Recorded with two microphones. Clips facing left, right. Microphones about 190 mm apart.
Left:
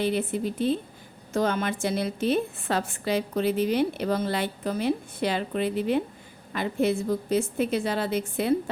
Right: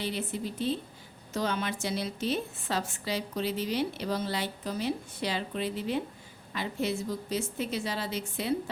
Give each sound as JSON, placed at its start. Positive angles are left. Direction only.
{"t": 0.0, "sound": "a woman's voice", "side_deg": 55}